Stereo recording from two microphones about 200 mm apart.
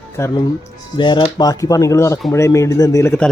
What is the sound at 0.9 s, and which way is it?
Speech, 25° left (ahead or behind).